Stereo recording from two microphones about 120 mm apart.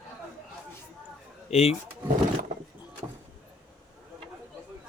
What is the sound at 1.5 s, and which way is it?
Speech, 60° left (ahead or behind).